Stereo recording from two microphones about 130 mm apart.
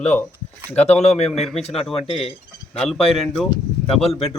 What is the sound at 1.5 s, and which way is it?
Speech, 50° left (ahead or behind).